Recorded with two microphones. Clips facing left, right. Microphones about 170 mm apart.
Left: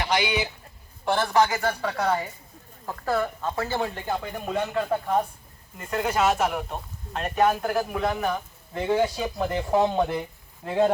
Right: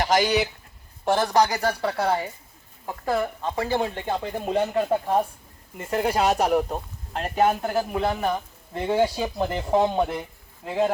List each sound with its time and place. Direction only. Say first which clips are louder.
0.0 s speech: right 4 dB; 40° right (ahead or behind)
2.8 s speech: right 1 dB; 15° right (ahead or behind)